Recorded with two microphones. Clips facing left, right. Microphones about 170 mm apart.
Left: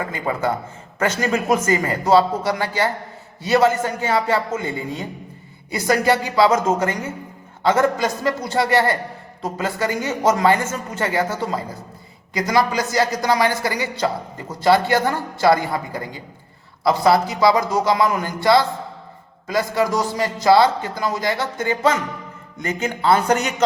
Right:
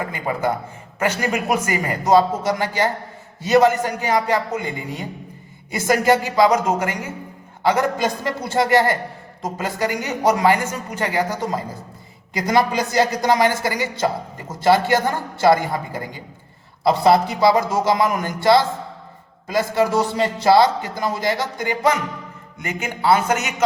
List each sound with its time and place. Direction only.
0.1 s speech: 20° right (ahead or behind)
13.2 s speech: 20° right (ahead or behind)
16.8 s speech: 25° right (ahead or behind); by 23.6 s 5° right (ahead or behind)